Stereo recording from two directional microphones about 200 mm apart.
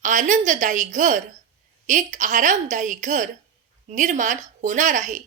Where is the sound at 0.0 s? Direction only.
40° right (ahead or behind).